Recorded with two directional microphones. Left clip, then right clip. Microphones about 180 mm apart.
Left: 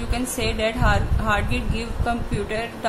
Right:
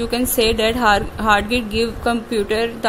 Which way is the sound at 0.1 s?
50° right (ahead or behind).